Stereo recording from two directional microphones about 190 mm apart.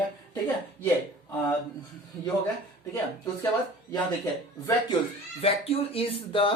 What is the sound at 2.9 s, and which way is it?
Speech, 20° left (ahead or behind).